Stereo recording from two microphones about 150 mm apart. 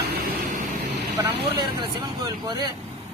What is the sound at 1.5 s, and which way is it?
A man's voice, 30° right (ahead or behind).